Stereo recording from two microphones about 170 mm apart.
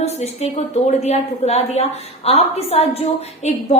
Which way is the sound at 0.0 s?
40° left (ahead or behind).